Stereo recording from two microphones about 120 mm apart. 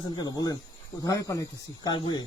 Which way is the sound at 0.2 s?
30° left (ahead or behind).